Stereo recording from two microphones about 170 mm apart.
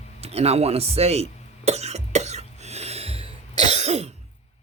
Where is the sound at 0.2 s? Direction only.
35° right (ahead or behind).